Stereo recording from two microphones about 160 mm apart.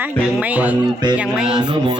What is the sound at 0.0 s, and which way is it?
Speech, 10° right (ahead or behind).